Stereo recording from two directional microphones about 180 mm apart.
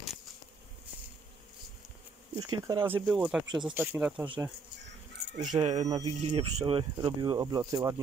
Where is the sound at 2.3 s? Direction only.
20° right (ahead or behind).